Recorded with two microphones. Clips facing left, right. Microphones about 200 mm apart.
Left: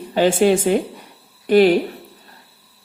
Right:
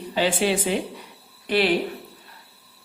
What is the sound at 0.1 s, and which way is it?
A woman's voice, 45° left (ahead or behind).